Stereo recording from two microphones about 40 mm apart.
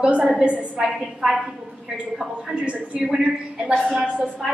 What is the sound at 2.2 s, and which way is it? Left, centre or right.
Speech, centre.